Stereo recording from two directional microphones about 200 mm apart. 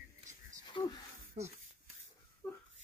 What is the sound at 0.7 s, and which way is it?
Wheeze, 20° left (ahead or behind).